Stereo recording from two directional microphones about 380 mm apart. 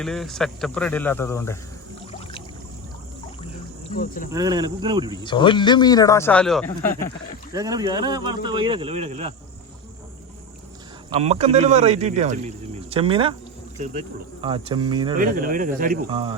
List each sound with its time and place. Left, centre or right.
0.0 s speech: centre
3.8 s speech: left
4.3 s speech: centre
5.2 s a man's voice: centre
7.5 s speech: centre
11.1 s speech: centre